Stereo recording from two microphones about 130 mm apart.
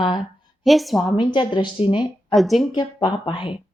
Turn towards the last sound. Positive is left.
turn(degrees=40)  # may be behind; listen again after turning